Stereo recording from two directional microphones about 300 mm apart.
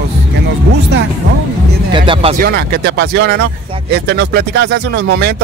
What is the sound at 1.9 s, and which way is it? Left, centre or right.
Speech, centre.